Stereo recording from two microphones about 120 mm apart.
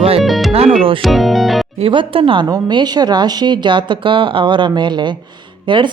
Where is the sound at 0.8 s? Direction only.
50° right (ahead or behind).